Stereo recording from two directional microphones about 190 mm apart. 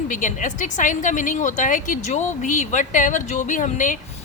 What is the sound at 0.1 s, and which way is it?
A woman's voice, 40° left (ahead or behind).